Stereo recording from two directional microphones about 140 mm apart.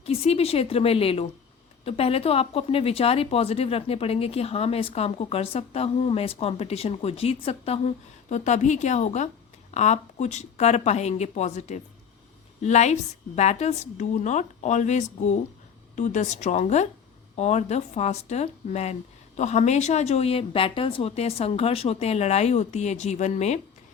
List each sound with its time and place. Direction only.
0.0 s a woman's voice: 45° left (ahead or behind)